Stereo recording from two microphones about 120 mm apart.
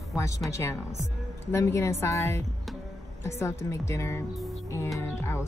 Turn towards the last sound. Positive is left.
turn(degrees=20)  # may be behind; listen again after turning